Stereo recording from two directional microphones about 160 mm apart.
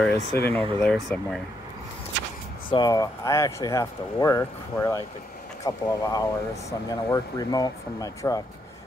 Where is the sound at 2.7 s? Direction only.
25° left (ahead or behind).